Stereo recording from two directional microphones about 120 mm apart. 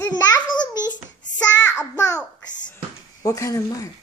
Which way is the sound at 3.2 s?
25° left (ahead or behind).